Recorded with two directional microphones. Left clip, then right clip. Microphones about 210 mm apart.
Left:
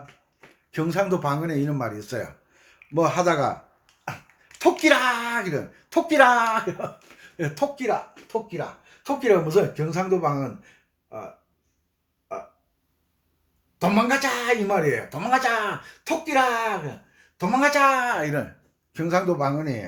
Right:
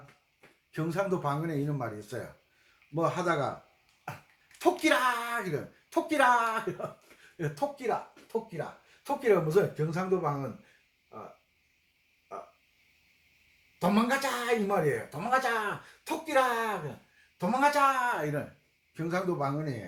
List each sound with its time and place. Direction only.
0.7 s a man's voice: 30° left (ahead or behind)
4.5 s a man's voice: 25° left (ahead or behind)
13.7 s a man's voice: 30° left (ahead or behind)